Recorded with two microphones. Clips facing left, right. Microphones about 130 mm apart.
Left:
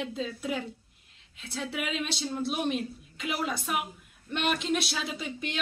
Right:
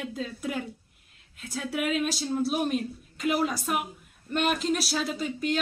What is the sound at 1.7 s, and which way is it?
Speech, 45° right (ahead or behind).